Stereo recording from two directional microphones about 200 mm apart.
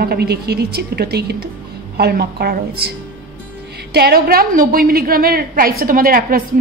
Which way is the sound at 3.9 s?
50° right (ahead or behind).